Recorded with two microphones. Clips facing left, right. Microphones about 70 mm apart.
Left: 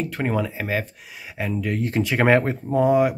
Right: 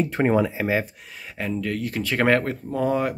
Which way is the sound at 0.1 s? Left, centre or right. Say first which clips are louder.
Right 4 dB; centre.